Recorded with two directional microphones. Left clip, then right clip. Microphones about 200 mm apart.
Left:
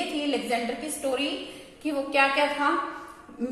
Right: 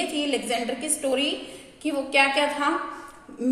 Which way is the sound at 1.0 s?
50° right (ahead or behind).